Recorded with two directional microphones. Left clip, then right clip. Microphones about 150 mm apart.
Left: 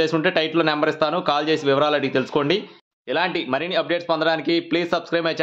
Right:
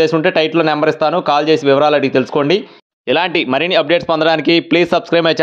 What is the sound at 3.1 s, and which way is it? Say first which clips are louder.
A man's voice: right 8 dB; 60° right (ahead or behind).